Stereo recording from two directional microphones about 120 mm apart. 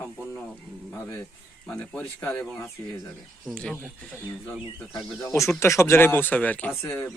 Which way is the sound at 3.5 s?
5° left (ahead or behind).